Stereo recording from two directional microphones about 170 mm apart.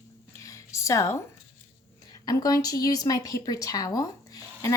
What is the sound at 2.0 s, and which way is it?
A woman's voice, 20° left (ahead or behind).